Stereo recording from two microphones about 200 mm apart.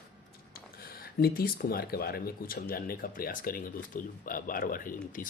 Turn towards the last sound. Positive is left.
turn(degrees=45)  # may be behind; listen again after turning